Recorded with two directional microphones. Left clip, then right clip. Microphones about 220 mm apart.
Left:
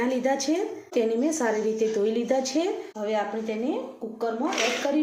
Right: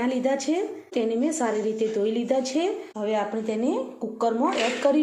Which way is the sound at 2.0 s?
5° right (ahead or behind).